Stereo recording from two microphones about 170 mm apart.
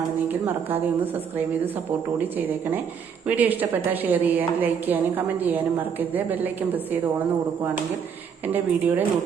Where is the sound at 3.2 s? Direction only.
10° right (ahead or behind).